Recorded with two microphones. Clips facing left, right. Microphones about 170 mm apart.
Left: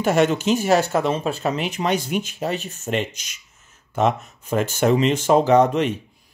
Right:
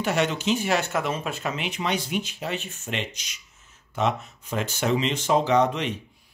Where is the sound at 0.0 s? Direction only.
45° left (ahead or behind).